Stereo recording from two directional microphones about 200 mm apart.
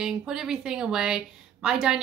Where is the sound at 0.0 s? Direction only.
5° right (ahead or behind).